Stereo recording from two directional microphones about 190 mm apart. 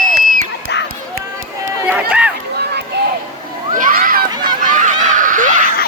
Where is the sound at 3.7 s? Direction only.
45° right (ahead or behind).